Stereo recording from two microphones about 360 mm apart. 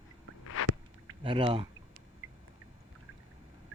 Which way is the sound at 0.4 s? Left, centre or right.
Left.